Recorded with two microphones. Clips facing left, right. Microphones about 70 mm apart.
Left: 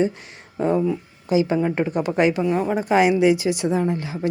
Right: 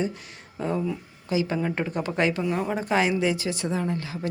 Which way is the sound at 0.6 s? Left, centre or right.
Left.